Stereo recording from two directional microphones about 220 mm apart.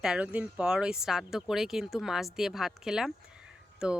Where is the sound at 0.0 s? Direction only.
5° right (ahead or behind).